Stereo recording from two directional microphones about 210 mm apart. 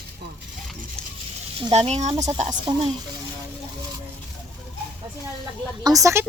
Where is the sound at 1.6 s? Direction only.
25° right (ahead or behind).